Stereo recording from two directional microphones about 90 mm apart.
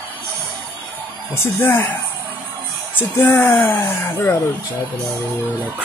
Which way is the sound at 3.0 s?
20° left (ahead or behind).